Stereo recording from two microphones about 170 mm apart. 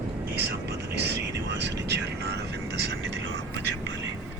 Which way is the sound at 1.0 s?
90° right.